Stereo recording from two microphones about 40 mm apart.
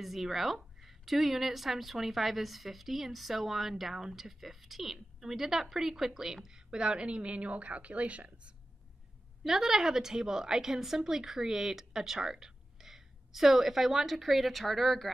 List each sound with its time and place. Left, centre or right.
0.0 s a woman's voice: centre; by 8.3 s right
9.4 s a woman's voice: centre